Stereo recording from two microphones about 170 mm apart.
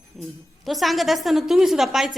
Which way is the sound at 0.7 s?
Centre (ahead or behind).